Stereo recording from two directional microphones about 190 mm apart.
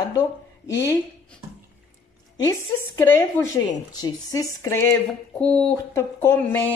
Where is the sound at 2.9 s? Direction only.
15° left (ahead or behind).